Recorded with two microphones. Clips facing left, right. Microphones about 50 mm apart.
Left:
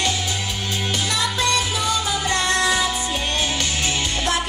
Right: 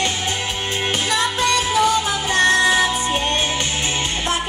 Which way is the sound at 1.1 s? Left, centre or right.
Right.